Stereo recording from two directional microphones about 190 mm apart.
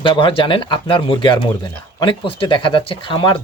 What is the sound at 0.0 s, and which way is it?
Speech, 25° left (ahead or behind).